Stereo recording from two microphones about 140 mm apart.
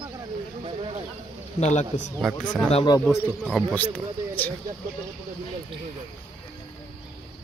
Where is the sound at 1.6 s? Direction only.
55° left (ahead or behind).